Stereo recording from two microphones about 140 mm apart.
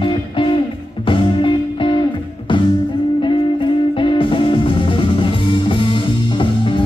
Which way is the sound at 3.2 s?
35° left (ahead or behind).